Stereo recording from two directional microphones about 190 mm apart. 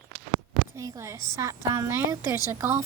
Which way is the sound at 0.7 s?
15° right (ahead or behind).